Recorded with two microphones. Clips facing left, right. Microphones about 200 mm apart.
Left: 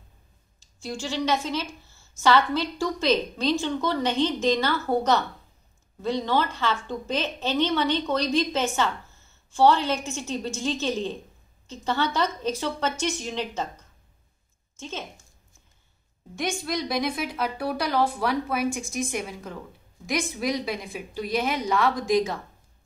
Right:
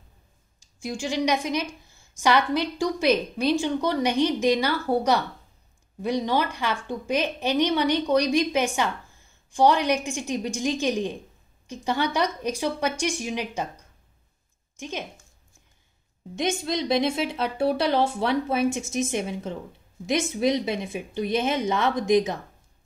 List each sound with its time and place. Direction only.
0.6 s a woman's voice: 15° right (ahead or behind)
16.3 s a woman's voice: 20° right (ahead or behind)